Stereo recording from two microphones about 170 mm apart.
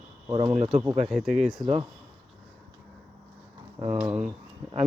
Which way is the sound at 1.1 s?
5° right (ahead or behind).